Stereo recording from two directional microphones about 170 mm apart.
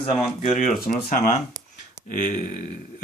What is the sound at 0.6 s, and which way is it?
Speech, 50° left (ahead or behind).